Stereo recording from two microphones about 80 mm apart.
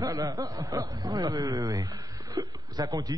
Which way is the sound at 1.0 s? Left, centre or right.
Right.